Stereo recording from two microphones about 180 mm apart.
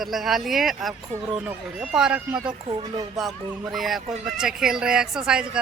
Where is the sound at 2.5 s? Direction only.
25° right (ahead or behind).